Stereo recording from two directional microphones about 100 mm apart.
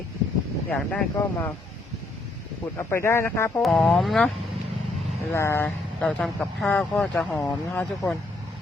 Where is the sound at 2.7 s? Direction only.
25° left (ahead or behind).